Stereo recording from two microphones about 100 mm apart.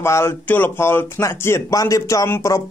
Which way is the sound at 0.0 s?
25° left (ahead or behind).